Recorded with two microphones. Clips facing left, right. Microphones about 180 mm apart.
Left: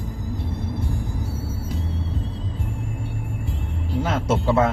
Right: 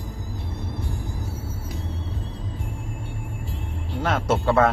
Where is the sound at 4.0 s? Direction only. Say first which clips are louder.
Even; 60° right (ahead or behind).